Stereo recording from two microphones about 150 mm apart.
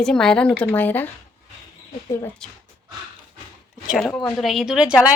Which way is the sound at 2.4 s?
5° left (ahead or behind).